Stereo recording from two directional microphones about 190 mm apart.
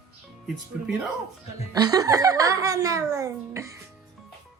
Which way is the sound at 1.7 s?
20° right (ahead or behind).